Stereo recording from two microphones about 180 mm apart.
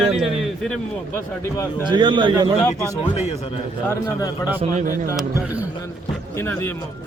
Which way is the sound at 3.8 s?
20° left (ahead or behind).